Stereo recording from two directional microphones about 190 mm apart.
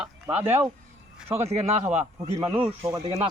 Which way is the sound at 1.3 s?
35° right (ahead or behind).